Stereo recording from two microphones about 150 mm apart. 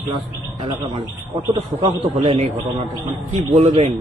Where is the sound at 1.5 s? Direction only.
35° right (ahead or behind).